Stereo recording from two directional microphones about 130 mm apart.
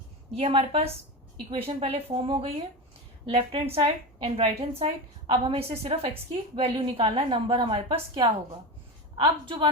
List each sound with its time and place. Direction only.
0.3 s a woman's voice: 45° right (ahead or behind)